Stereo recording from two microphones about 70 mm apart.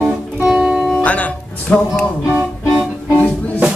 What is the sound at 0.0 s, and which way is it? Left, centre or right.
Music, centre.